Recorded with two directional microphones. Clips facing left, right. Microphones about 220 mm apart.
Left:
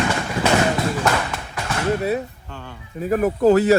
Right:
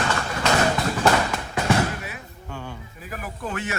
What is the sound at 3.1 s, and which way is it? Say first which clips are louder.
Speech: left 17 dB; 45° left (ahead or behind).